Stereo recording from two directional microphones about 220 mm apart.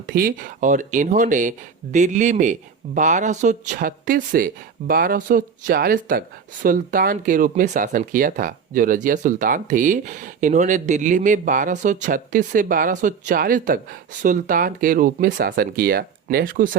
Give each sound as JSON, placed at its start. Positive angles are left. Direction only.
{"t": 0.1, "sound": "speech", "side_deg": -40}